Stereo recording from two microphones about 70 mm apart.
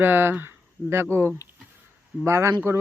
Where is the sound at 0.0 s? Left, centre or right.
Right.